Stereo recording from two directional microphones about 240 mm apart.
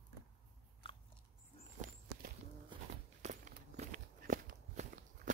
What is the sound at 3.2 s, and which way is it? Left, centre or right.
Walk, right.